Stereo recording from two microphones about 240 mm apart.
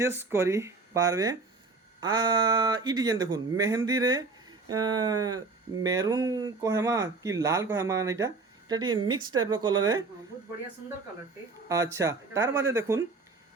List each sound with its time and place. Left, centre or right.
0.2 s speech: centre
11.7 s speech: centre